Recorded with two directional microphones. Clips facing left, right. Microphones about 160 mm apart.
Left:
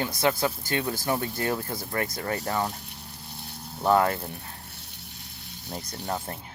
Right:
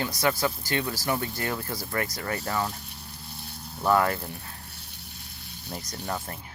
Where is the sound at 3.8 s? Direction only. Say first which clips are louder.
Left 1 dB; 20° left (ahead or behind).